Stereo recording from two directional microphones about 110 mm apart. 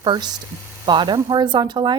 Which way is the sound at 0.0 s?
40° right (ahead or behind).